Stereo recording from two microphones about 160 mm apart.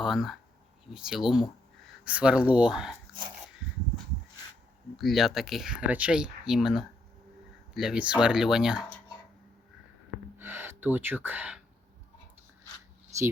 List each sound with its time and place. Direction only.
0.0 s speech: centre (ahead or behind)
4.9 s speech: centre (ahead or behind)
10.3 s speech: 15° right (ahead or behind)